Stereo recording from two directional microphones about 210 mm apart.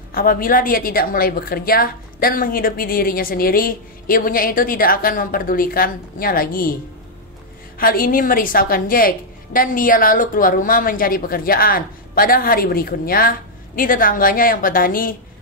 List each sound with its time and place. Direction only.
0.1 s a woman's voice: 45° left (ahead or behind)
7.8 s a woman's voice: 45° left (ahead or behind)